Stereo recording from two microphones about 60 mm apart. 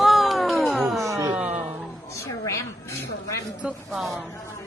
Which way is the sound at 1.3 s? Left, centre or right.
Right.